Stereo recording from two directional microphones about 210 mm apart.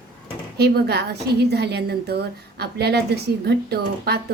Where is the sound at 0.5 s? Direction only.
50° right (ahead or behind).